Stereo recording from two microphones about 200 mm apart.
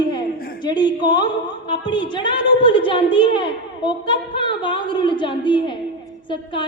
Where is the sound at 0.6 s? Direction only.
20° left (ahead or behind).